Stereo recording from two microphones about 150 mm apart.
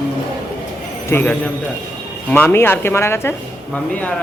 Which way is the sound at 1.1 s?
15° left (ahead or behind).